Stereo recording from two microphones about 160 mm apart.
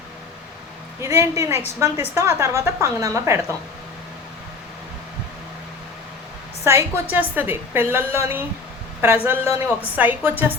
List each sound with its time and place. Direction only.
1.0 s a woman's voice: 15° right (ahead or behind)
6.7 s a woman's voice: 15° right (ahead or behind)